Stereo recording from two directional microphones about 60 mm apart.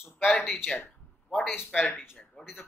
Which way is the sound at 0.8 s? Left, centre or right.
Centre.